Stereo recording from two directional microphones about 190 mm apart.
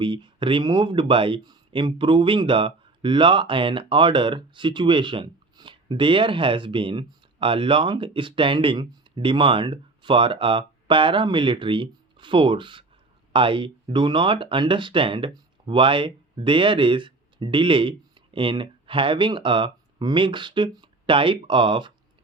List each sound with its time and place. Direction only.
0.0 s speech: 25° right (ahead or behind)